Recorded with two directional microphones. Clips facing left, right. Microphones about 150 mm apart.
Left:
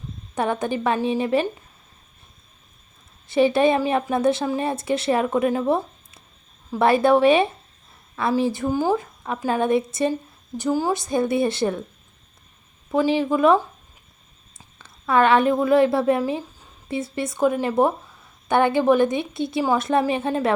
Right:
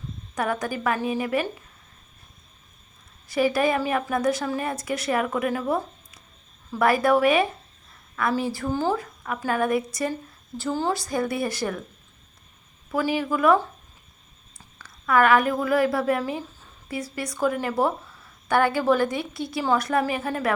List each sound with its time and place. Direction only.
0.3 s a woman's voice: 25° left (ahead or behind)
3.2 s a woman's voice: 25° left (ahead or behind)
10.6 s a woman's voice: 10° left (ahead or behind)
12.9 s a woman's voice: 20° left (ahead or behind)
14.8 s a woman's voice: 25° left (ahead or behind)